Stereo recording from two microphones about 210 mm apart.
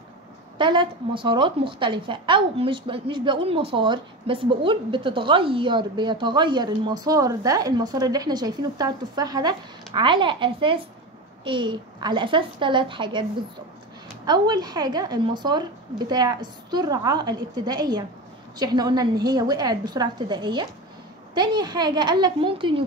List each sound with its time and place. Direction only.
0.6 s a woman's voice: 20° right (ahead or behind)
14.2 s a woman's voice: 20° right (ahead or behind)